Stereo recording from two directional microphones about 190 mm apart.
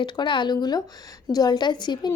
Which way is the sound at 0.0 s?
25° left (ahead or behind).